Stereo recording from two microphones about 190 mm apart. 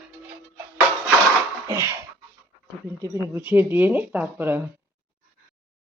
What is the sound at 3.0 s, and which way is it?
Speech, 15° right (ahead or behind).